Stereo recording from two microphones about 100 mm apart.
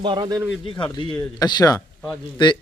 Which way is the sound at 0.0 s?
50° right (ahead or behind).